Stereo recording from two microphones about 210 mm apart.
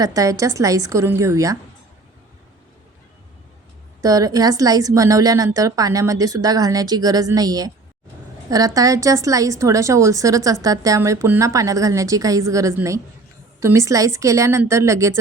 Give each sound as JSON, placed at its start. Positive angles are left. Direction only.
{"t": 0.0, "sound": "a woman's voice", "side_deg": -15}
{"t": 4.0, "sound": "a woman's voice", "side_deg": -15}